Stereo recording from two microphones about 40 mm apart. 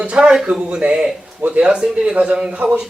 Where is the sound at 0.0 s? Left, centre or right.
Right.